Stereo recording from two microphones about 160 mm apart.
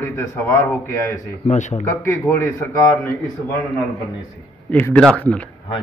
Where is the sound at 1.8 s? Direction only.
15° left (ahead or behind).